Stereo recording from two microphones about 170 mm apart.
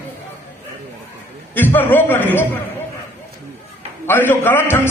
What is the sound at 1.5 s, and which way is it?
Speech, 10° left (ahead or behind).